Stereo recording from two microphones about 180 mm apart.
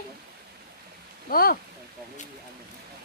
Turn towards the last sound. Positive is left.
turn(degrees=55)  # may be behind; listen again after turning